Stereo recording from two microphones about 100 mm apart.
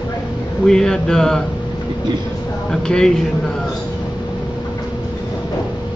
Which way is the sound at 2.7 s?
5° left (ahead or behind).